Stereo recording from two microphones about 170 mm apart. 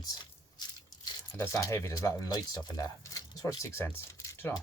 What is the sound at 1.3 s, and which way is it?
Speech, 15° left (ahead or behind).